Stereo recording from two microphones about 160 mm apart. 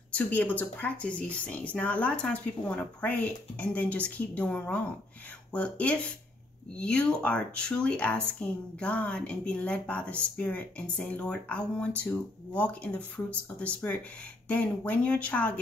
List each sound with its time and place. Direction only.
0.1 s speech: 10° left (ahead or behind)